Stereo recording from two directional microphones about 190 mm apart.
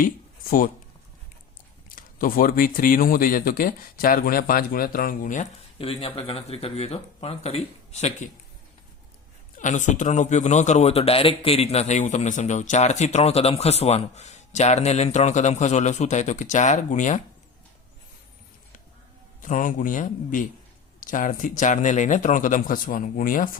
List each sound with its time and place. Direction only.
2.0 s speech: 45° left (ahead or behind)
9.6 s a man's voice: 40° left (ahead or behind)
19.4 s speech: 45° left (ahead or behind)